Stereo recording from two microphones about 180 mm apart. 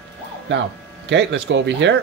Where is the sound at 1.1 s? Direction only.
80° right.